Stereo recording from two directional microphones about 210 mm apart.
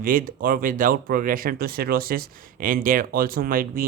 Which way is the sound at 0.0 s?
40° right (ahead or behind).